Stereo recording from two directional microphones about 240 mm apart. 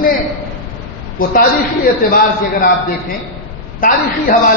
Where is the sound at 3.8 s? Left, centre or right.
Left.